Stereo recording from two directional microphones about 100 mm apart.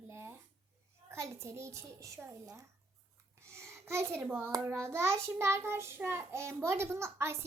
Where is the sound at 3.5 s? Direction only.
25° right (ahead or behind).